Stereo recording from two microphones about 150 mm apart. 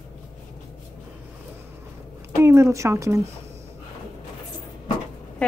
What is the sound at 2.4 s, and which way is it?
Speech, 20° right (ahead or behind).